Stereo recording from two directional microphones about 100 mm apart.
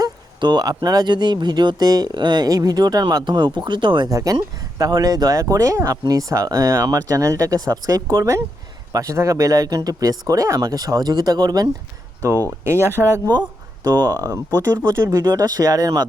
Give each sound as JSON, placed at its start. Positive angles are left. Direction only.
{"t": 0.0, "sound": "speech", "side_deg": -45}
{"t": 4.1, "sound": "speech", "side_deg": -35}
{"t": 12.6, "sound": "speech", "side_deg": -25}
{"t": 13.8, "sound": "speech", "side_deg": -45}
{"t": 14.6, "sound": "speech", "side_deg": -25}
{"t": 15.1, "sound": "speech", "side_deg": -40}